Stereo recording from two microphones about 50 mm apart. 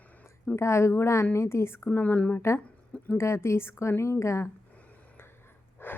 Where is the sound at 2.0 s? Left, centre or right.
Left.